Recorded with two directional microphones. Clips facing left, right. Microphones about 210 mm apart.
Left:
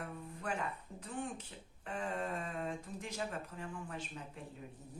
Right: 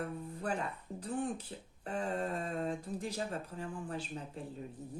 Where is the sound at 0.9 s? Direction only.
35° right (ahead or behind).